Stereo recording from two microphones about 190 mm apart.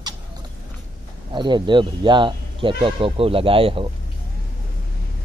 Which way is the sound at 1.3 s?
25° right (ahead or behind).